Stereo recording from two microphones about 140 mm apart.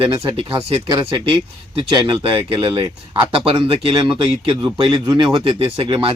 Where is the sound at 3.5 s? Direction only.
40° right (ahead or behind).